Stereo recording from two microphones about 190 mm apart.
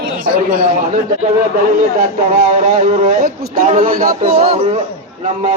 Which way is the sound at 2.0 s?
35° right (ahead or behind).